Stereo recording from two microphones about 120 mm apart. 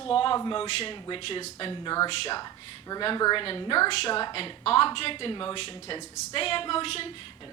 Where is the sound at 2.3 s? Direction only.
35° left (ahead or behind).